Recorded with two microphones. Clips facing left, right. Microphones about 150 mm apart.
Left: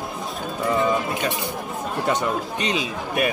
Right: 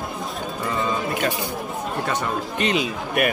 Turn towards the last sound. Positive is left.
turn(degrees=25)  # may be behind; listen again after turning